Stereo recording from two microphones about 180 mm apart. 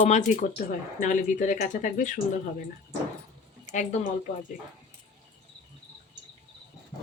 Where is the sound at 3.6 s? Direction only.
40° left (ahead or behind).